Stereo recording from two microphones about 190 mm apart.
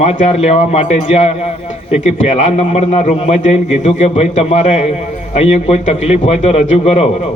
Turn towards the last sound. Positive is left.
turn(degrees=35)  # may be behind; listen again after turning